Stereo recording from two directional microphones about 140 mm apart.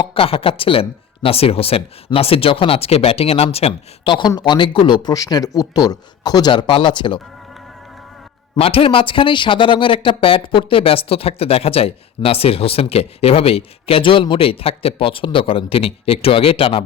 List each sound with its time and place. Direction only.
0.0 s speech: 40° left (ahead or behind)
8.5 s speech: 45° left (ahead or behind)